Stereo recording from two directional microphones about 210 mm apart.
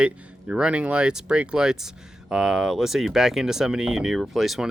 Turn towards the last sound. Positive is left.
turn(degrees=0)  # may be behind; listen again after turning